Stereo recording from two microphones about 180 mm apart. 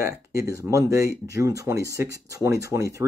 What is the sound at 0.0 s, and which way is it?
Speech, 15° right (ahead or behind).